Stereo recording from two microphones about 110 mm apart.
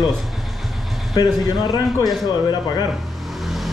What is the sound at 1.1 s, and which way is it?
A man's voice, 35° left (ahead or behind).